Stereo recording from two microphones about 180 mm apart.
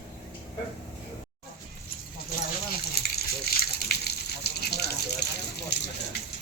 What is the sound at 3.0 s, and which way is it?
Water, 60° left (ahead or behind).